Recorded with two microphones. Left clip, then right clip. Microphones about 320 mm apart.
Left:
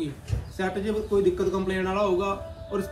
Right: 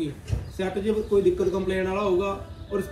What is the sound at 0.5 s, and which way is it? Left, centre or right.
A man's voice, centre.